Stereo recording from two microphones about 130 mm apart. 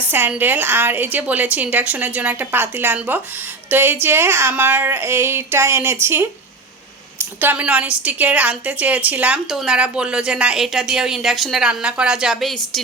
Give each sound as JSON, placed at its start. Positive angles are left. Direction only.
{"t": 0.0, "sound": "a woman's voice", "side_deg": -15}
{"t": 7.5, "sound": "a woman's voice", "side_deg": -10}